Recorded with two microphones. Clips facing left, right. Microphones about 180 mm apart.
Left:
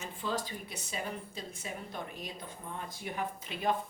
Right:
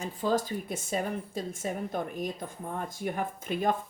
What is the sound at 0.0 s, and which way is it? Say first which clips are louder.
Speech: right 8 dB; 40° right (ahead or behind).